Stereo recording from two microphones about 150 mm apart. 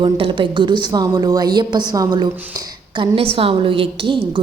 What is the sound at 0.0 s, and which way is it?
A woman's voice, 35° right (ahead or behind).